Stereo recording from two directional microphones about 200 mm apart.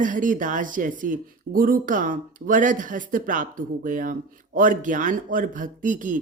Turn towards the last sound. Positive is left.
turn(degrees=-40)  # may be behind; listen again after turning